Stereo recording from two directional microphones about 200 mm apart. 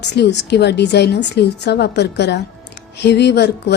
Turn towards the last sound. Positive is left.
turn(degrees=60)  # may be behind; listen again after turning